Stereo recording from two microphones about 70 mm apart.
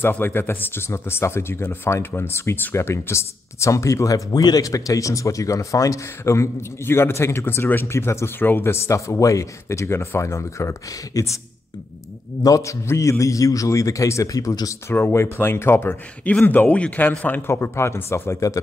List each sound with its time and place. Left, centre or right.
0.0 s speech: left
4.3 s speech: left
12.4 s speech: left
12.8 s speech: left
13.2 s speech: left
14.9 s speech: left
17.5 s speech: left